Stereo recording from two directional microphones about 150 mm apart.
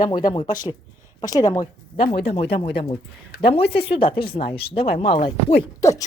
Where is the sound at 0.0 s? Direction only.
30° left (ahead or behind).